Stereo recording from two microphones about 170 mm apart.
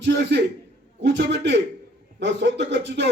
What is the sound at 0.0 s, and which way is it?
A man's voice, 90° right.